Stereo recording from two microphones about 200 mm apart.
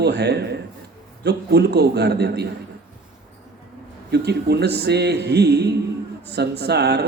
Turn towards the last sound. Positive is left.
turn(degrees=-55)  # may be behind; listen again after turning